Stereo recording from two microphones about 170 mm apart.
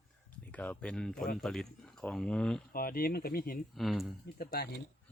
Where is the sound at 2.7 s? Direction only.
60° left (ahead or behind).